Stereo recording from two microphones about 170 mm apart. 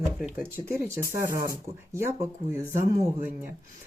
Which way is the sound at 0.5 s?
15° right (ahead or behind).